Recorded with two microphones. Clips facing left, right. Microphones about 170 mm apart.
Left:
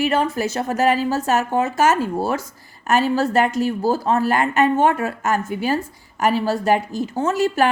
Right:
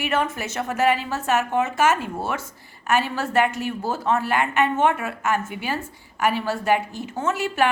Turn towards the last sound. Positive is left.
turn(degrees=40)  # may be behind; listen again after turning